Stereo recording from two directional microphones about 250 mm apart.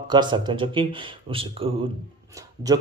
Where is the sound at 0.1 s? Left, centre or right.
Centre.